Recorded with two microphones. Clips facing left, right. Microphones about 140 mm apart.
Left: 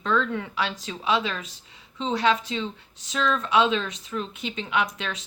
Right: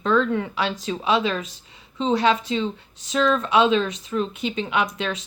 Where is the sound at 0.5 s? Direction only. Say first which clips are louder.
Right 4 dB; 25° right (ahead or behind).